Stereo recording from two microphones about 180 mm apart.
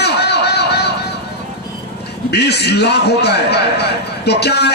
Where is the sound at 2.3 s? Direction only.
65° left (ahead or behind).